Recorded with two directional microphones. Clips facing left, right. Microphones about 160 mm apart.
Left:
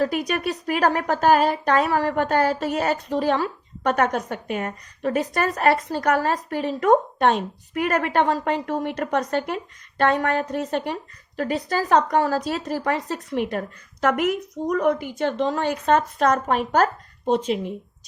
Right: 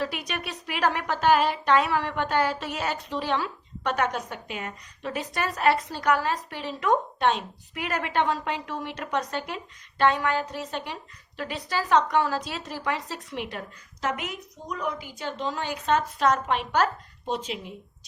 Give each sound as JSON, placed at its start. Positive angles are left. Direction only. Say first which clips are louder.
{"t": 0.0, "sound": "a woman's voice", "louder": "left 8 dB", "side_deg": 45}
{"t": 14.7, "sound": "a woman's voice", "louder": "left 10 dB", "side_deg": 50}